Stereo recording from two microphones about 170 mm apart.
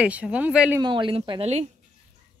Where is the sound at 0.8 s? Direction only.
30° right (ahead or behind).